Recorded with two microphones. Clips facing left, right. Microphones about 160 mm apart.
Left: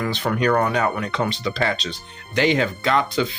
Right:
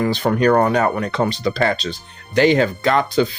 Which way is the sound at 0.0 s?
35° right (ahead or behind).